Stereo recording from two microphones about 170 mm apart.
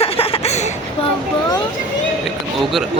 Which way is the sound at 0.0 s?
35° left (ahead or behind).